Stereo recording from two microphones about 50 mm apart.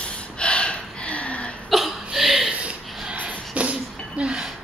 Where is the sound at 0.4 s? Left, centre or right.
Left.